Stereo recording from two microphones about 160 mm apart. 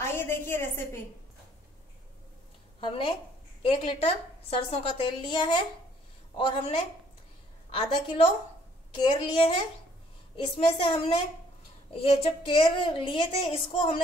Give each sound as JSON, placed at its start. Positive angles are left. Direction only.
{"t": 0.0, "sound": "a woman's voice", "side_deg": 15}
{"t": 2.8, "sound": "a woman's voice", "side_deg": 35}
{"t": 7.7, "sound": "a woman's voice", "side_deg": 35}
{"t": 10.5, "sound": "a woman's voice", "side_deg": 30}